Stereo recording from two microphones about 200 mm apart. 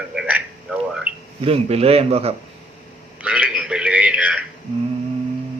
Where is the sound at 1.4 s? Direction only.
30° right (ahead or behind).